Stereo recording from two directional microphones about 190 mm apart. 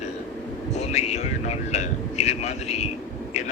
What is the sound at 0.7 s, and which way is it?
Speech, 35° left (ahead or behind).